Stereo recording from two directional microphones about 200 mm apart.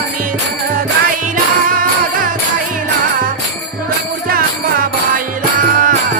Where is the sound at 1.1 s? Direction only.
45° right (ahead or behind).